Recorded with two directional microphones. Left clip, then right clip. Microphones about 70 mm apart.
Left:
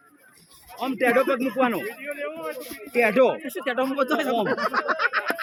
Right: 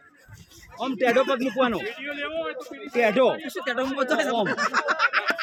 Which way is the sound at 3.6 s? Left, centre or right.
Right.